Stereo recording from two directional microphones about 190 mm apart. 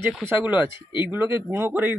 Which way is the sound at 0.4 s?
10° right (ahead or behind).